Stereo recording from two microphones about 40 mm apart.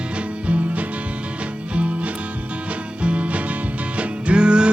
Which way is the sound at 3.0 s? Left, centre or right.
Right.